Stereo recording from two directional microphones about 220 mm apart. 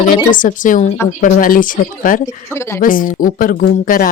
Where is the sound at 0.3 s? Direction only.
35° left (ahead or behind).